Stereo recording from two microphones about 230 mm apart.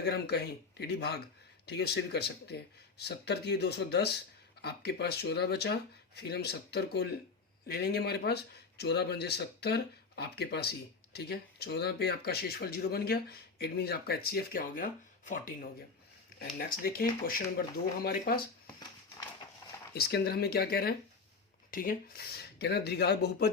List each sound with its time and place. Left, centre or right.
0.0 s speech: left
16.4 s speech: left
19.9 s speech: left